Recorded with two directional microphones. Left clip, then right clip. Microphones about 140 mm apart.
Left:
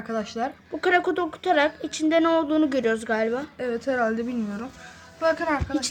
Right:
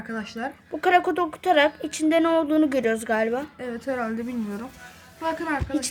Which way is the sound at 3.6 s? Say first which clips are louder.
Left 4 dB; 35° left (ahead or behind).